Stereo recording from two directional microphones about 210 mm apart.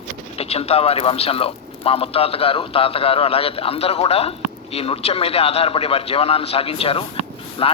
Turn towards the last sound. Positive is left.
turn(degrees=25)  # may be behind; listen again after turning